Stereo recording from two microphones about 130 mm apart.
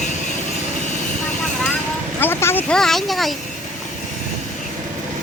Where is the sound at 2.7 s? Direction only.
5° left (ahead or behind).